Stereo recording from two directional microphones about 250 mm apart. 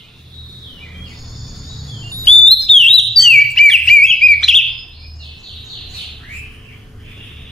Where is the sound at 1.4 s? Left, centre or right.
Centre.